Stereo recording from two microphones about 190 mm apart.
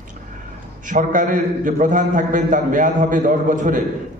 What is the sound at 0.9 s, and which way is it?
A man's voice, 45° right (ahead or behind).